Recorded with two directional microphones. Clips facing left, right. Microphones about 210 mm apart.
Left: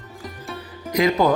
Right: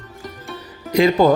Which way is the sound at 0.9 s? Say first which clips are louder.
Right 4 dB; 30° right (ahead or behind).